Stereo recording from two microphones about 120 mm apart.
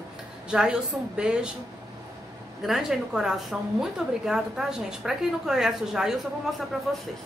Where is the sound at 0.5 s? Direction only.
5° right (ahead or behind).